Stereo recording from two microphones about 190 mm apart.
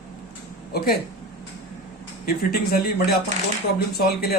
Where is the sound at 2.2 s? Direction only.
55° left (ahead or behind).